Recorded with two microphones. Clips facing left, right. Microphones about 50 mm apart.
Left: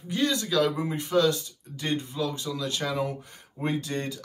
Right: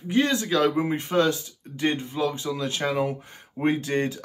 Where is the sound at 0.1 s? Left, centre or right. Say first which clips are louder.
Right 3 dB; right.